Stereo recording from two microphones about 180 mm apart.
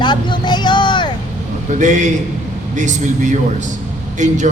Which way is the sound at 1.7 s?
45° right (ahead or behind).